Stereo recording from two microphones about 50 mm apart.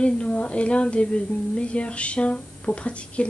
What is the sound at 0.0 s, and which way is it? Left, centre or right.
Speech, left.